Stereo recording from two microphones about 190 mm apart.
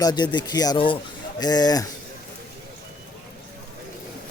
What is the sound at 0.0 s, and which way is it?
Speech, 20° left (ahead or behind).